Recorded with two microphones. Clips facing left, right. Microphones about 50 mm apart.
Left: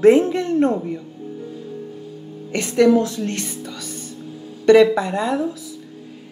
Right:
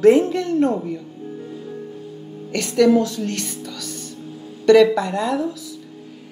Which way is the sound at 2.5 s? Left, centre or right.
Centre.